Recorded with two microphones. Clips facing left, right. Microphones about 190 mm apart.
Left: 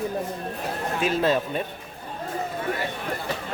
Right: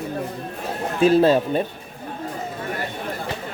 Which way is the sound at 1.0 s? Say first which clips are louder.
Right 8 dB; 35° right (ahead or behind).